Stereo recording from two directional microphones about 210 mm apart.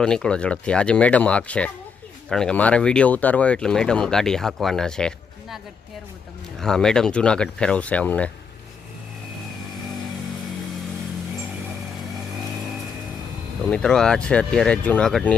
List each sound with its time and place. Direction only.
0.0 s speech: 5° left (ahead or behind)
6.6 s speech: 5° left (ahead or behind)
13.7 s speech: 5° left (ahead or behind)